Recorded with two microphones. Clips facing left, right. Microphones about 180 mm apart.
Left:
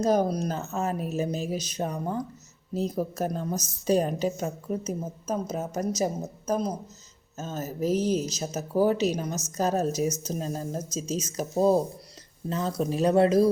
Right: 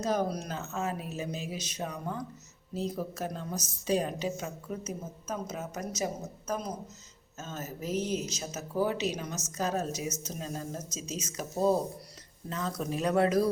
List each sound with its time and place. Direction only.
0.0 s a woman's voice: 40° left (ahead or behind)